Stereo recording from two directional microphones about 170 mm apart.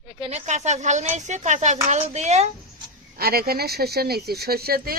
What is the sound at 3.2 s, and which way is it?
Speech, 65° right (ahead or behind).